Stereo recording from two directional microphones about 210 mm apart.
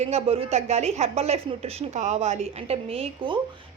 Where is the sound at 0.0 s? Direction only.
30° right (ahead or behind).